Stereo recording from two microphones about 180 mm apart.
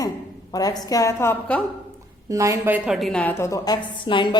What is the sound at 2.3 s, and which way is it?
A woman's voice, 15° right (ahead or behind).